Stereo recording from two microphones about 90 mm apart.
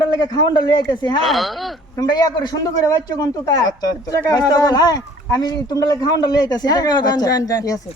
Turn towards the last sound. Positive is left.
turn(degrees=40)  # may be behind; listen again after turning